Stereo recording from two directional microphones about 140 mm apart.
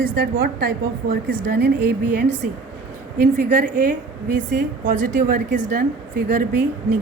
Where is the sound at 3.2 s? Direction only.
80° right.